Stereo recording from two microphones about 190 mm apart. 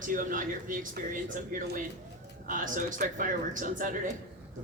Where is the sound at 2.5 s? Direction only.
45° right (ahead or behind).